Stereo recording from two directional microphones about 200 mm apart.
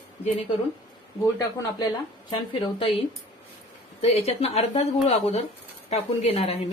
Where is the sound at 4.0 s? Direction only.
30° left (ahead or behind).